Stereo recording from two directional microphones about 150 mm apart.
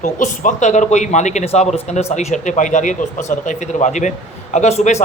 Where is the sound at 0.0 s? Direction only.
55° left (ahead or behind).